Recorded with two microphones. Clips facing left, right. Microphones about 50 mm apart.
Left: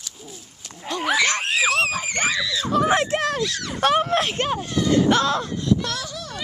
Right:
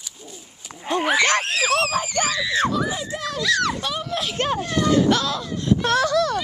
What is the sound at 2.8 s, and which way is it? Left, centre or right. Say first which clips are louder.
Speech: left 7 dB; left.